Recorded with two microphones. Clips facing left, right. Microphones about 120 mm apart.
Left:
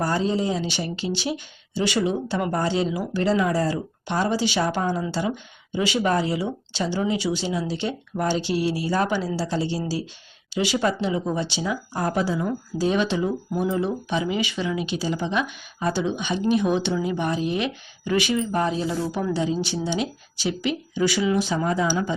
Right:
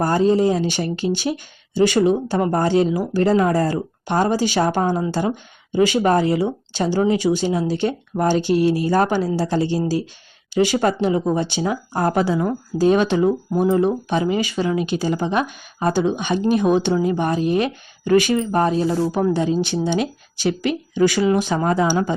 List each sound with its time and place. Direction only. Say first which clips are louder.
0.0 s speech: right 7 dB; 50° right (ahead or behind)
12.5 s speech: right 6 dB; 50° right (ahead or behind)